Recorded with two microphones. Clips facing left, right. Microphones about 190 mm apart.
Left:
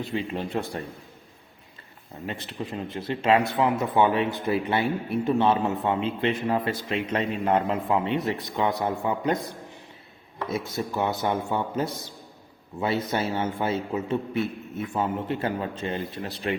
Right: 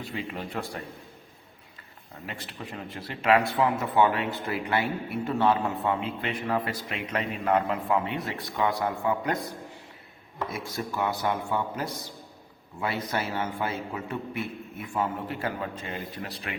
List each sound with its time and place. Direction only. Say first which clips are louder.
0.1 s speech: left 5 dB; 25° left (ahead or behind)
2.2 s speech: left 6 dB; 25° left (ahead or behind)
10.5 s speech: left 7 dB; 25° left (ahead or behind)